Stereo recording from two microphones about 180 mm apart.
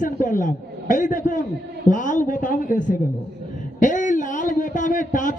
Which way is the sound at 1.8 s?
45° left (ahead or behind).